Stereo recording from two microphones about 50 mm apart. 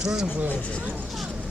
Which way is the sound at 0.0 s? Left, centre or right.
Centre.